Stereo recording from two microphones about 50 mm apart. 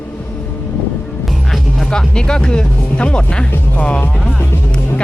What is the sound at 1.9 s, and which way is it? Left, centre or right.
Speech, centre.